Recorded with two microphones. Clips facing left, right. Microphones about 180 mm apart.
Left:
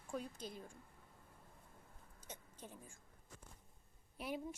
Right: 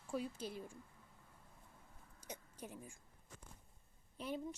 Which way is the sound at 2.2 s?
15° right (ahead or behind).